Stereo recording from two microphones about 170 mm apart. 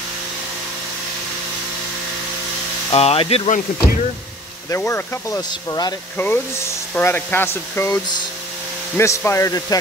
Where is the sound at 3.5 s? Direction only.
50° left (ahead or behind).